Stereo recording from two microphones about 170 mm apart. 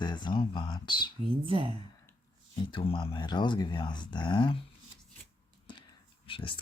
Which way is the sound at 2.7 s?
30° left (ahead or behind).